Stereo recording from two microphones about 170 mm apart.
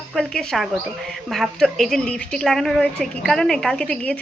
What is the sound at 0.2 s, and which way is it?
A woman's voice, centre (ahead or behind).